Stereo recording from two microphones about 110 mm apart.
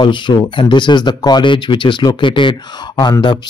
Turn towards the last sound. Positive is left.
turn(degrees=40)  # may be behind; listen again after turning